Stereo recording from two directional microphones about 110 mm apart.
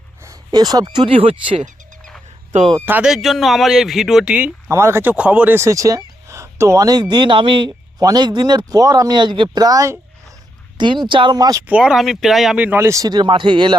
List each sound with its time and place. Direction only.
0.2 s speech: 35° right (ahead or behind)
1.0 s speech: 55° right (ahead or behind)
2.7 s speech: 20° right (ahead or behind)
3.0 s speech: centre (ahead or behind)
4.7 s speech: 25° right (ahead or behind)
5.6 s speech: 30° right (ahead or behind)
11.6 s speech: 10° right (ahead or behind)
12.6 s speech: 20° right (ahead or behind); by 13.7 s 45° right (ahead or behind)